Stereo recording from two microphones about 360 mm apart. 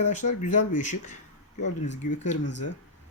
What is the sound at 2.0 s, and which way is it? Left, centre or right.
Speech, left.